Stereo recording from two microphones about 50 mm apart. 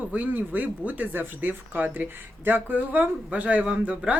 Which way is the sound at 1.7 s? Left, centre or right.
Right.